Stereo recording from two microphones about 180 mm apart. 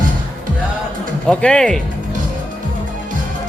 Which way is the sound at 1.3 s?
5° left (ahead or behind).